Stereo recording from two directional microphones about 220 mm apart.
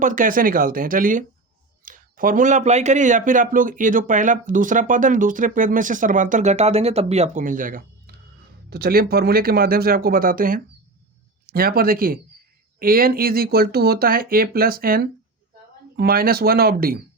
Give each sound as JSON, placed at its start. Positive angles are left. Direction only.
{"t": 0.0, "sound": "speech", "side_deg": -35}